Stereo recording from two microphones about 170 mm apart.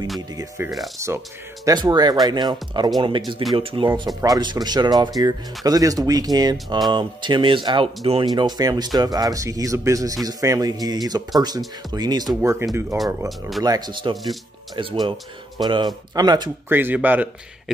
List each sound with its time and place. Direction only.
0.9 s speech: 15° right (ahead or behind)
16.6 s speech: 10° right (ahead or behind)